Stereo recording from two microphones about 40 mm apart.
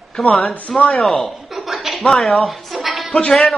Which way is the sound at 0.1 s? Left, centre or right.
Centre.